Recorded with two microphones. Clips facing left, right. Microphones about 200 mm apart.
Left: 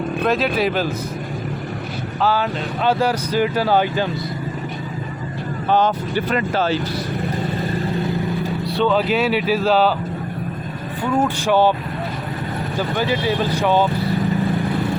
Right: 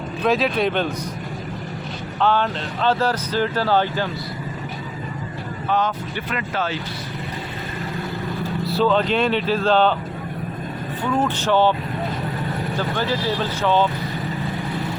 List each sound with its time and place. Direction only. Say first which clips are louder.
0.3 s speech: right 1 dB; centre (ahead or behind)
2.2 s speech: even; 5° left (ahead or behind)
5.6 s speech: left 4 dB; 30° left (ahead or behind)
8.6 s speech: even; centre (ahead or behind)
11.2 s speech: left 2 dB; 10° left (ahead or behind)
13.0 s speech: left 4 dB; 15° left (ahead or behind)